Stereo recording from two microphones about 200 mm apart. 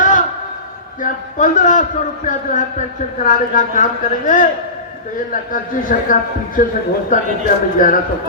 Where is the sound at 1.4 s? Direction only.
40° left (ahead or behind).